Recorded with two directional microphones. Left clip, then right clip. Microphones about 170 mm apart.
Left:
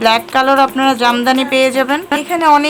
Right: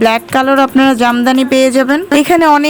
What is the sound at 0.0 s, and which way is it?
A woman's voice, 30° right (ahead or behind).